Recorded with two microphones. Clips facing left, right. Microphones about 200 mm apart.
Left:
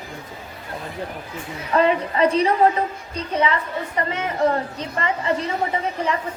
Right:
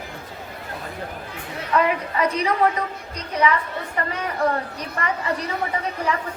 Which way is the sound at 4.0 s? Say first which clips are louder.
Left 2 dB; 20° left (ahead or behind).